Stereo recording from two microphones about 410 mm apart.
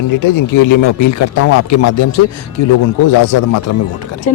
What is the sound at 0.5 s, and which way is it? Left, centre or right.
Speech, left.